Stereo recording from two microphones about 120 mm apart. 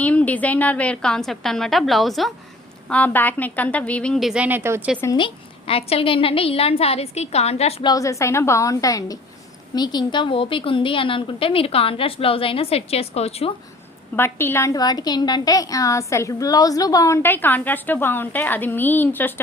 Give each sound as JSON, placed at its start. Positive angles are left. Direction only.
{"t": 0.0, "sound": "a woman's voice", "side_deg": 10}
{"t": 2.9, "sound": "a woman's voice", "side_deg": 15}
{"t": 4.4, "sound": "speech", "side_deg": -20}
{"t": 5.1, "sound": "a woman's voice", "side_deg": 45}
{"t": 7.8, "sound": "a woman's voice", "side_deg": 30}
{"t": 14.2, "sound": "a woman's voice", "side_deg": 20}